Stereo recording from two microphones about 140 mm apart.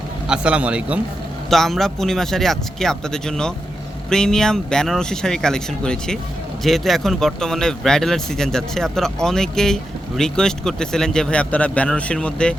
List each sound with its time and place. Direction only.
0.3 s a man's voice: 10° right (ahead or behind)
1.5 s speech: centre (ahead or behind)